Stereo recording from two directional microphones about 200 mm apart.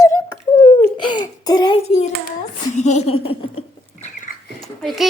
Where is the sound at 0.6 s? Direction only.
30° left (ahead or behind).